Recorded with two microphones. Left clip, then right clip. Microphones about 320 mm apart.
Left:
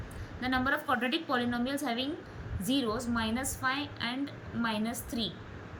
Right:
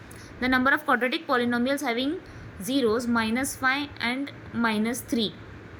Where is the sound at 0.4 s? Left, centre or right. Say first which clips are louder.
Right 8 dB; centre.